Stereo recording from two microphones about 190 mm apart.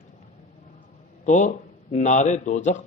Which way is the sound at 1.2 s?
40° left (ahead or behind).